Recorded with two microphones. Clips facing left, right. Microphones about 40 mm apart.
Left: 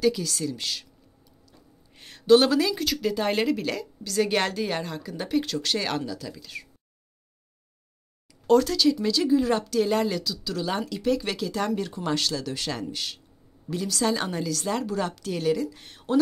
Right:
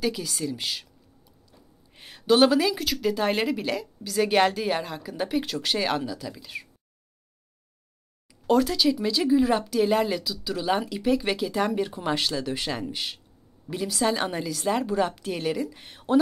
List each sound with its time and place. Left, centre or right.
0.0 s speech: centre
2.0 s speech: centre
8.5 s speech: centre